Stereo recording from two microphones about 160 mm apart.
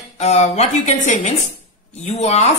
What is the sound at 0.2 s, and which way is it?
A woman's voice, 40° left (ahead or behind).